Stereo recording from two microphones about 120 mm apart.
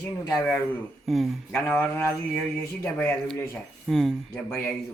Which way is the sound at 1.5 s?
20° left (ahead or behind).